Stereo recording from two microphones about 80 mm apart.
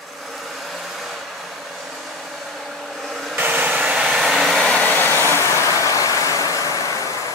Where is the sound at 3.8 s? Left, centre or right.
Centre.